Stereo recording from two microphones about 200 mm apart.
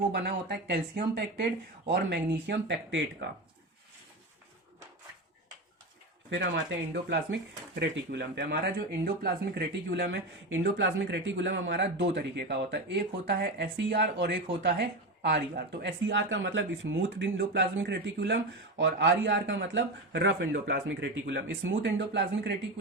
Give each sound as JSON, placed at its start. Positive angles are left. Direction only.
{"t": 0.1, "sound": "speech", "side_deg": -50}
{"t": 6.3, "sound": "speech", "side_deg": -65}
{"t": 7.8, "sound": "speech", "side_deg": -55}
{"t": 20.8, "sound": "speech", "side_deg": -65}